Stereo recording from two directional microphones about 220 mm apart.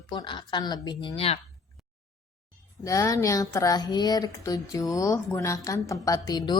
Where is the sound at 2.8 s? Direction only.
15° left (ahead or behind).